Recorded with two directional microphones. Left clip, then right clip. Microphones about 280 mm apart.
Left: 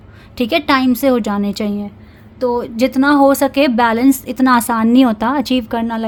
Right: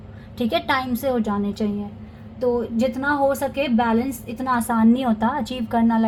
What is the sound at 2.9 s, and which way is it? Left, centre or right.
A woman's voice, left.